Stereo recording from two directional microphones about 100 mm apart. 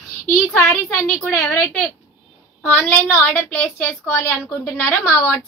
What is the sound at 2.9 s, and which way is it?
A woman's voice, 20° left (ahead or behind).